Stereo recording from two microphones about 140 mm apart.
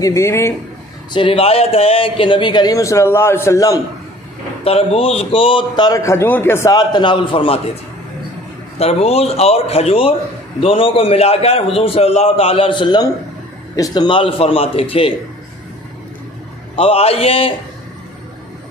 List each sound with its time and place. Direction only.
0.0 s a man's voice: 20° left (ahead or behind)
1.1 s a man's voice: 40° left (ahead or behind); by 3.8 s 25° left (ahead or behind)
4.6 s a man's voice: 45° left (ahead or behind); by 6.7 s 15° left (ahead or behind)
6.7 s a man's voice: 30° left (ahead or behind)
8.7 s a man's voice: 45° left (ahead or behind)
16.7 s a man's voice: 45° left (ahead or behind)